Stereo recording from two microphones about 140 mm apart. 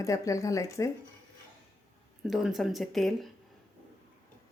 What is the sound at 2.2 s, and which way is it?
A woman's voice, centre (ahead or behind).